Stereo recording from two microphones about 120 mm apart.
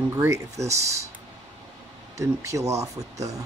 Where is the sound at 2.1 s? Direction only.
25° right (ahead or behind).